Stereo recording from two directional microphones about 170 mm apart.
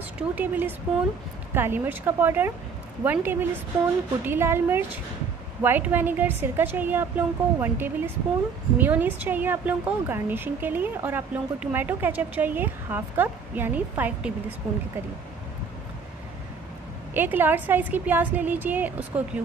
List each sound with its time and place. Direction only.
0.4 s speech: 10° right (ahead or behind)
17.1 s speech: 10° right (ahead or behind)